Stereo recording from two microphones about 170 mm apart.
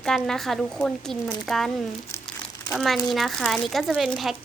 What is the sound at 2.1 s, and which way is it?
Crumpling, 15° left (ahead or behind).